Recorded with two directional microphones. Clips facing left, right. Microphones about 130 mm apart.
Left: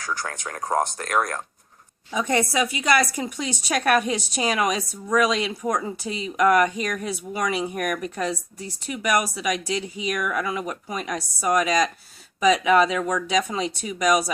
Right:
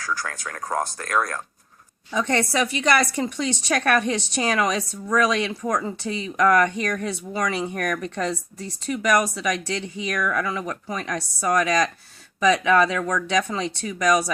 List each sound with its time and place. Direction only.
0.0 s a woman's voice: 20° left (ahead or behind)